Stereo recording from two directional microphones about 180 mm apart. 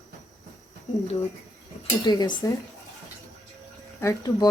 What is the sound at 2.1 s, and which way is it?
Speech, 25° left (ahead or behind).